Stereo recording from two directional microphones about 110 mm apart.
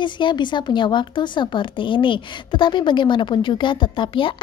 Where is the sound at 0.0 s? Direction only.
45° left (ahead or behind).